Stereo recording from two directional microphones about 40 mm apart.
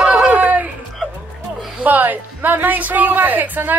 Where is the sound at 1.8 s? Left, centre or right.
Right.